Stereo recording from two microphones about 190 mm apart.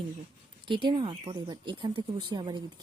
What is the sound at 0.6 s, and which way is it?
Speech, 25° right (ahead or behind).